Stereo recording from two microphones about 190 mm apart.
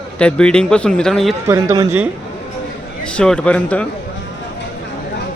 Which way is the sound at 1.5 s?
20° right (ahead or behind).